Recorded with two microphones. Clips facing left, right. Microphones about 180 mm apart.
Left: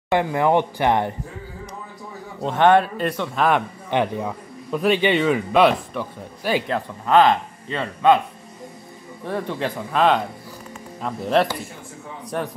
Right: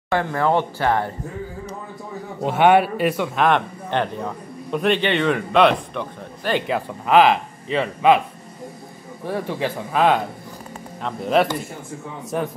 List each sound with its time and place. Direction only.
0.1 s a man's voice: 15° left (ahead or behind)
2.4 s a man's voice: 10° right (ahead or behind)
3.4 s a man's voice: 10° left (ahead or behind)
6.7 s a man's voice: 10° right (ahead or behind)
9.2 s speech: centre (ahead or behind)